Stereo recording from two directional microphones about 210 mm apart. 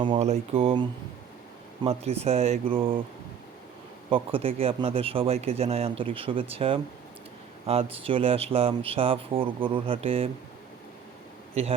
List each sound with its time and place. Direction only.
0.0 s speech: 25° right (ahead or behind)
4.1 s speech: 25° right (ahead or behind)
11.6 s speech: 30° right (ahead or behind)